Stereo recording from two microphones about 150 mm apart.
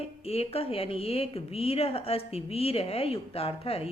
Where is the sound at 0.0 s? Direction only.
40° left (ahead or behind).